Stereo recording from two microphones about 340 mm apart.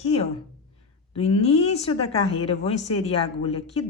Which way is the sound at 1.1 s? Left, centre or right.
Centre.